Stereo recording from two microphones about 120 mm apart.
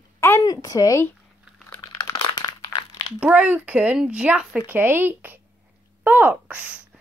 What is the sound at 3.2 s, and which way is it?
Speech, 15° right (ahead or behind).